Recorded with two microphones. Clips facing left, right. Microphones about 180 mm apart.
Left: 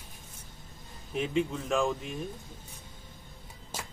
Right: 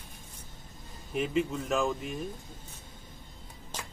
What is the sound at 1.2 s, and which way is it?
Speech, centre (ahead or behind).